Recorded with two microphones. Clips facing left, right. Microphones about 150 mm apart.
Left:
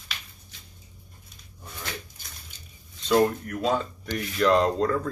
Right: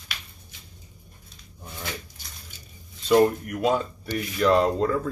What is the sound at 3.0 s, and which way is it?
Speech, 10° right (ahead or behind).